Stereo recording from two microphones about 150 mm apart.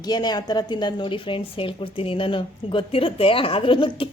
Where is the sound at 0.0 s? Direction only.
30° left (ahead or behind).